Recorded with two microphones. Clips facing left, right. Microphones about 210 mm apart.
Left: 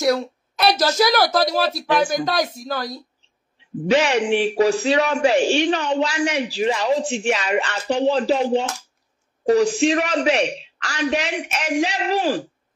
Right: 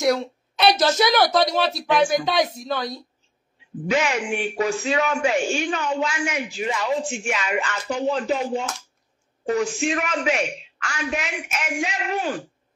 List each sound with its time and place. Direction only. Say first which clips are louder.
0.0 s a sound: left 1 dB; centre (ahead or behind)
0.7 s a woman's voice: left 1 dB; 25° right (ahead or behind)
1.0 s speech: left 1 dB; 5° left (ahead or behind)
3.9 s a man's voice: left 5 dB; 35° left (ahead or behind)